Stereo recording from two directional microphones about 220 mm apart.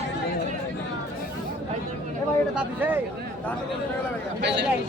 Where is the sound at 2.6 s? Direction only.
10° right (ahead or behind).